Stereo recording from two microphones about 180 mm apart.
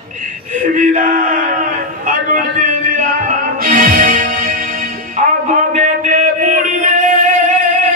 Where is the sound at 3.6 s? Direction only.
50° right (ahead or behind).